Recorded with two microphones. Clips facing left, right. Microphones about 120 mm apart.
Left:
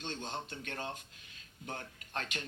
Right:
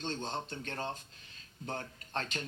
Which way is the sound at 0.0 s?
35° right (ahead or behind).